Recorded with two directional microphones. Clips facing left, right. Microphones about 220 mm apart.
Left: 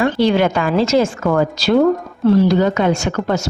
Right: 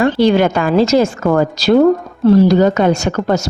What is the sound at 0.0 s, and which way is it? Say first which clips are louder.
A woman's voice: right 3 dB; 40° right (ahead or behind).